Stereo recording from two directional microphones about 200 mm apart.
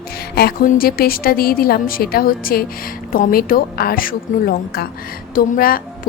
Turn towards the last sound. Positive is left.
turn(degrees=45)  # may be behind; listen again after turning